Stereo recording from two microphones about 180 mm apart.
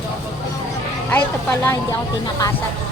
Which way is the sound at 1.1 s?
15° left (ahead or behind).